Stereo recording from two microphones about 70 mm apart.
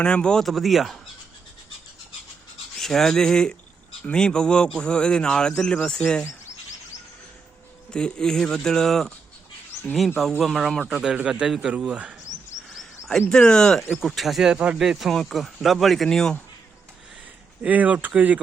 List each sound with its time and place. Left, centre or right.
0.0 s speech: centre
2.7 s speech: centre
7.9 s speech: centre
10.4 s speech: centre
11.1 s a man's voice: centre
12.7 s speech: centre
13.9 s speech: centre
17.6 s speech: right